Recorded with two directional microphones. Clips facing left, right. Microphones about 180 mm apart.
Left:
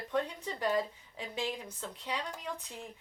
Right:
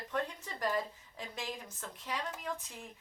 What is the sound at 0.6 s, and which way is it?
Speech, 15° left (ahead or behind).